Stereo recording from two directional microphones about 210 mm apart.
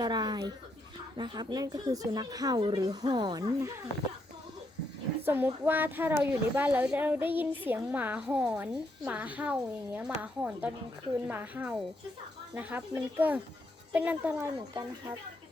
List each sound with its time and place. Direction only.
0.0 s a sound: 20° right (ahead or behind)
1.1 s speech: 20° right (ahead or behind)
5.2 s speech: 10° right (ahead or behind)